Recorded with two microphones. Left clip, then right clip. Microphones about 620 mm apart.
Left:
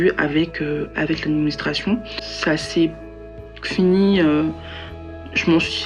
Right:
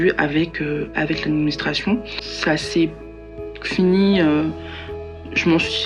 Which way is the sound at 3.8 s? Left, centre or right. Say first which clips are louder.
Even; centre.